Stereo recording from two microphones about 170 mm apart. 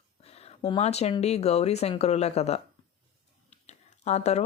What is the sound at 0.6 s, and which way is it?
Speech, 35° left (ahead or behind).